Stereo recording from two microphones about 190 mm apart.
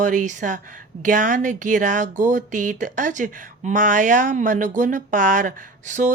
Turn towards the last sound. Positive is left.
turn(degrees=-40)  # may be behind; listen again after turning